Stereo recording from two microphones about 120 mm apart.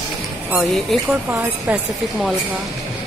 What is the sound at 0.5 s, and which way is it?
Speech, 5° right (ahead or behind).